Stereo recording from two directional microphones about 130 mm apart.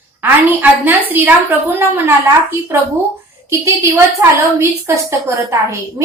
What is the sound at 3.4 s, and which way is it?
A woman's voice, 20° right (ahead or behind).